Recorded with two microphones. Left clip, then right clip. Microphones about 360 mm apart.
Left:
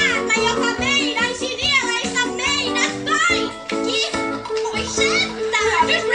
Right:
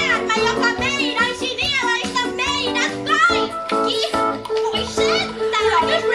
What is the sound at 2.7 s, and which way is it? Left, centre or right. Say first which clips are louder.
Music: right 1 dB; right.